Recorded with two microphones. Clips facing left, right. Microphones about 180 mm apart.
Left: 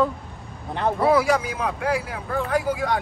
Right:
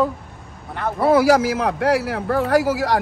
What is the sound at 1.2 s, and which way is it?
A man's voice, 80° right.